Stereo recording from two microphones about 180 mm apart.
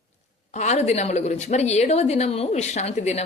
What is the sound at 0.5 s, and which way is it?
A woman's voice, 40° left (ahead or behind).